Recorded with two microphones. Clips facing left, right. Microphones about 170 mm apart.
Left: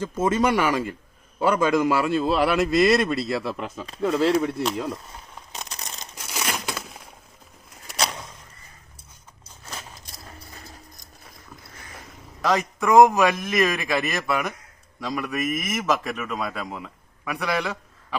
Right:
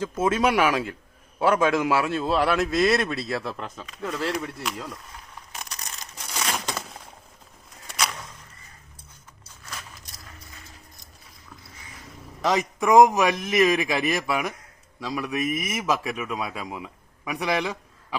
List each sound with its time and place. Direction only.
0.0 s a man's voice: 5° right (ahead or behind)
3.8 s speech: 30° left (ahead or behind)
5.5 s a sound: 25° left (ahead or behind)
10.2 s clip-clop: 35° left (ahead or behind)
12.4 s a man's voice: 20° right (ahead or behind)